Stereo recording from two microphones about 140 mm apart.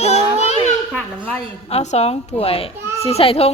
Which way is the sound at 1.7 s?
50° left (ahead or behind).